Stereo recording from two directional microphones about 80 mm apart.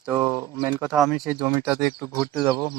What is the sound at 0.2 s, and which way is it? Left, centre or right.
Speech, right.